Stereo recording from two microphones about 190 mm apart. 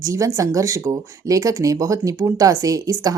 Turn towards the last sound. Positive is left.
turn(degrees=-20)  # may be behind; listen again after turning